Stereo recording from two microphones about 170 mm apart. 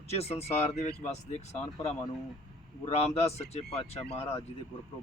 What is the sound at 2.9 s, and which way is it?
Speech, 40° left (ahead or behind).